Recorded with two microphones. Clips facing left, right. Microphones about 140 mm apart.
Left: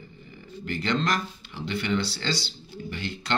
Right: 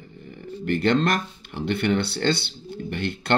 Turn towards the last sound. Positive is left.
turn(degrees=-60)  # may be behind; listen again after turning